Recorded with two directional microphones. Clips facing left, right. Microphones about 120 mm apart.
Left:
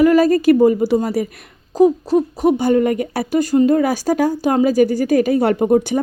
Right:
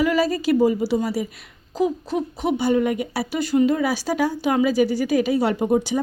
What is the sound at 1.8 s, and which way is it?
Speech, 40° left (ahead or behind).